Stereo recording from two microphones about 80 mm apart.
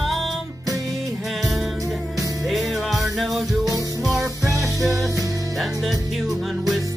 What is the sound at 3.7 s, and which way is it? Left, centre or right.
Music, right.